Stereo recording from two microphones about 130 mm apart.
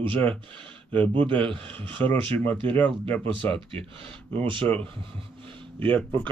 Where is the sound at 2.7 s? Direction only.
10° left (ahead or behind).